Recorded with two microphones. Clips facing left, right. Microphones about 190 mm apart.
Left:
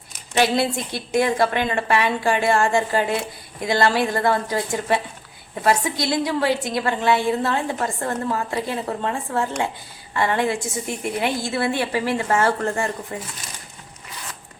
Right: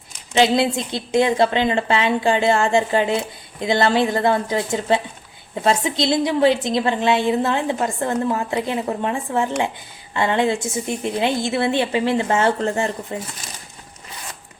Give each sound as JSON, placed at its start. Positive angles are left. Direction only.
{"t": 0.3, "sound": "a woman's voice", "side_deg": -20}